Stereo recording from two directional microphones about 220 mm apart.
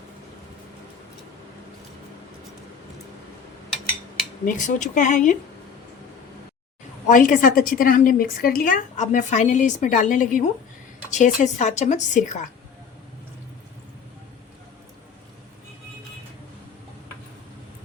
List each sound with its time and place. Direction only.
4.4 s a woman's voice: 35° left (ahead or behind)
7.1 s a woman's voice: 35° left (ahead or behind)